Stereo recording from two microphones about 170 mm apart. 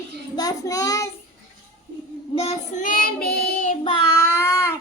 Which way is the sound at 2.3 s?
40° left (ahead or behind).